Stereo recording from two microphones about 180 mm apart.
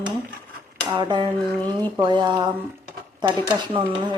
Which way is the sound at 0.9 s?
25° right (ahead or behind).